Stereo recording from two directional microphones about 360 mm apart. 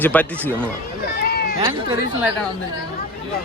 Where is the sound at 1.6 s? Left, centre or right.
Centre.